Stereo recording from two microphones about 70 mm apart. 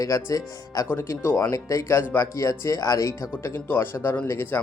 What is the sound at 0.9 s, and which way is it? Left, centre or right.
Speech, left.